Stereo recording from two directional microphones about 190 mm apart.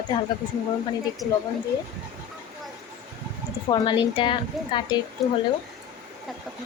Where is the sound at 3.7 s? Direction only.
25° left (ahead or behind).